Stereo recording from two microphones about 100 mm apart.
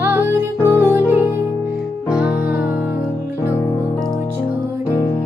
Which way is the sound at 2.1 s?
10° right (ahead or behind).